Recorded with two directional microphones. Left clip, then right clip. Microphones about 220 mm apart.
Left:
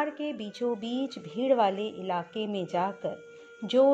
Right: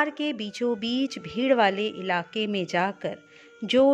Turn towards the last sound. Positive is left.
turn(degrees=-20)  # may be behind; listen again after turning